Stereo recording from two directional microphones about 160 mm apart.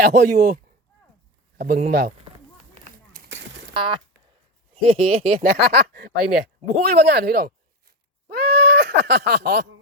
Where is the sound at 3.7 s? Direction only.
30° right (ahead or behind).